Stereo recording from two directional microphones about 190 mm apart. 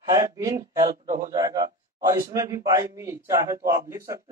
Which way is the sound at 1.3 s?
20° right (ahead or behind).